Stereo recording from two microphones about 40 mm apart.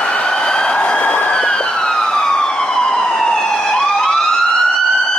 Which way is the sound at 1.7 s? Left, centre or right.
Left.